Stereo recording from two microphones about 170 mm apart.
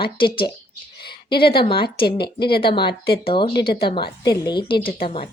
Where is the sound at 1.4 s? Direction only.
30° left (ahead or behind).